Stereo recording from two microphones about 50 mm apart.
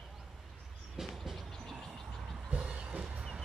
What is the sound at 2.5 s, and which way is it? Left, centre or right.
Music, right.